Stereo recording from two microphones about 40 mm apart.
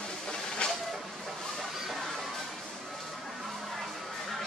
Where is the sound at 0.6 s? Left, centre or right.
Left.